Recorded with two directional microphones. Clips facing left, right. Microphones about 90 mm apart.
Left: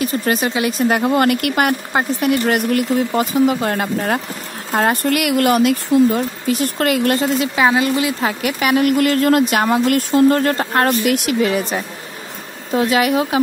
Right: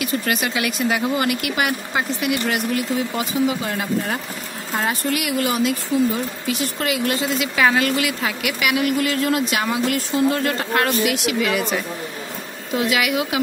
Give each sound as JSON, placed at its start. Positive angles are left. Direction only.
{"t": 0.0, "sound": "a woman's voice", "side_deg": 35}
{"t": 0.8, "sound": "speech", "side_deg": 50}
{"t": 7.5, "sound": "a woman's voice", "side_deg": 20}